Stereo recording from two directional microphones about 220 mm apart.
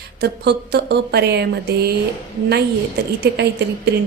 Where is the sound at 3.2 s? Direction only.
50° right (ahead or behind).